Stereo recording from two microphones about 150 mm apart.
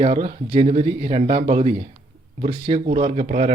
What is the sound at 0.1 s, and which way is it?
Speech, 35° right (ahead or behind).